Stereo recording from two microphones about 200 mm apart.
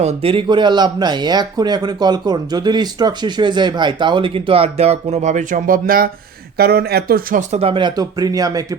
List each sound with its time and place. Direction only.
0.0 s speech: 30° right (ahead or behind); by 7.6 s 45° right (ahead or behind)
7.6 s speech: 25° right (ahead or behind)